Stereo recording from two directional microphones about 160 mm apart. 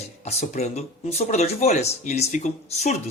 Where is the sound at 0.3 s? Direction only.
40° left (ahead or behind).